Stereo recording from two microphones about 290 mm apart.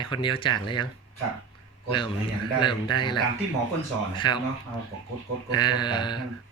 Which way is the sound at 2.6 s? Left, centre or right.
Centre.